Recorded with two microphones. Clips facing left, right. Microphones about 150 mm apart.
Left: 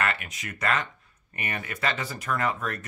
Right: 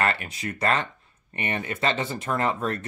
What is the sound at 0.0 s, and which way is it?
Speech, 30° right (ahead or behind).